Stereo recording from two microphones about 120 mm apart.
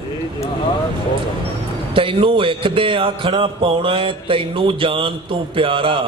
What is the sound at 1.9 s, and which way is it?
A man's voice, 50° right (ahead or behind).